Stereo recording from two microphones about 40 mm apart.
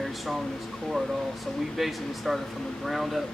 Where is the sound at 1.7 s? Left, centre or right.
Centre.